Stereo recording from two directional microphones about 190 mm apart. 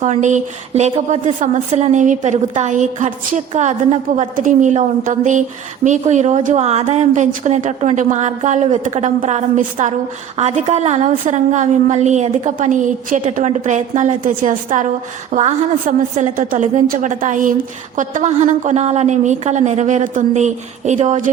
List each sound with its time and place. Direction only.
0.0 s a woman's voice: 40° right (ahead or behind)